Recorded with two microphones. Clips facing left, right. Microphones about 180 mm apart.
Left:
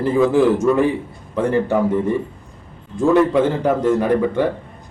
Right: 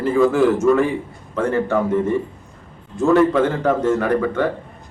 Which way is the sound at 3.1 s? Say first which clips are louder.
Even; 15° left (ahead or behind).